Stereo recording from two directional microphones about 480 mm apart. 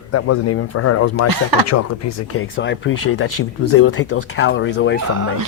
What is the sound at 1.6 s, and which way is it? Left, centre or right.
Speech, left.